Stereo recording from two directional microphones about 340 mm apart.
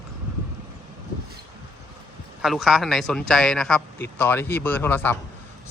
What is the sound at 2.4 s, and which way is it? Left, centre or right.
A man's voice, centre.